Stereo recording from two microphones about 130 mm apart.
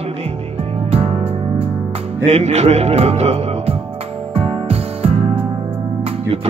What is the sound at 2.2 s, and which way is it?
Speech, 60° right (ahead or behind).